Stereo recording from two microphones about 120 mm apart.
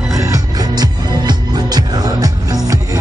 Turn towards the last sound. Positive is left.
turn(degrees=-30)  # may be behind; listen again after turning